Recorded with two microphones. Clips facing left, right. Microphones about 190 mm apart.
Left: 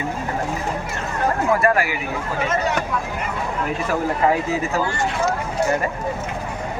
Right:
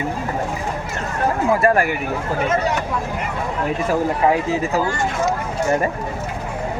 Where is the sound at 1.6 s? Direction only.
45° right (ahead or behind).